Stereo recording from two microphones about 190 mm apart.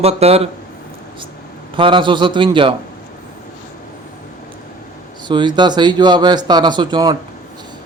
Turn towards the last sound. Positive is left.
turn(degrees=-20)  # may be behind; listen again after turning